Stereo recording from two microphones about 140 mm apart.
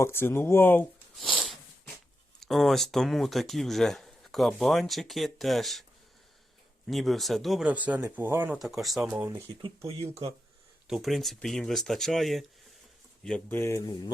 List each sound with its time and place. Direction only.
0.0 s speech: 15° left (ahead or behind)
1.1 s a sound: 5° left (ahead or behind)
2.4 s speech: centre (ahead or behind)
6.8 s speech: centre (ahead or behind)
8.5 s speech: centre (ahead or behind)
9.1 s speech: 15° right (ahead or behind)
9.6 s speech: 40° right (ahead or behind)
10.8 s speech: centre (ahead or behind)
13.2 s speech: 10° left (ahead or behind)